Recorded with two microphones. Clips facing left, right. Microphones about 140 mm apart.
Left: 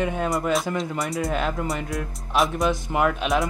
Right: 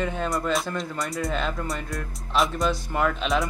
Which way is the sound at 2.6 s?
15° left (ahead or behind).